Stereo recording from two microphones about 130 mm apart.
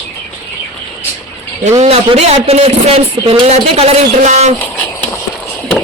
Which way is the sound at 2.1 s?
50° right (ahead or behind).